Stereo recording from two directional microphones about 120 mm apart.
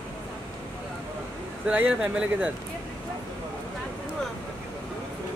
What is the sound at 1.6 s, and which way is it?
Speech, 10° right (ahead or behind).